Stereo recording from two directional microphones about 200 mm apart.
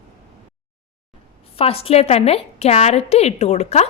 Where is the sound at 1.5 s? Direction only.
30° left (ahead or behind).